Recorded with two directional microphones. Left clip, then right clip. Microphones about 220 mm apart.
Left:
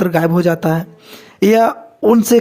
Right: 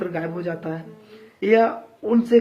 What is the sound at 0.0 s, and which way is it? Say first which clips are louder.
Speech: left 13 dB; 50° left (ahead or behind).